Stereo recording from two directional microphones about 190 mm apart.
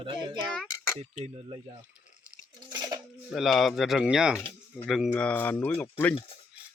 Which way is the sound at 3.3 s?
Centre (ahead or behind).